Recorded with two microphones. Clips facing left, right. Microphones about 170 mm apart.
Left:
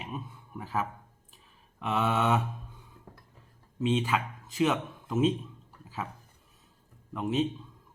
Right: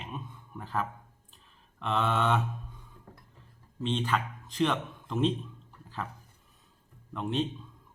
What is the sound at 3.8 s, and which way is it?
Speech, 10° left (ahead or behind).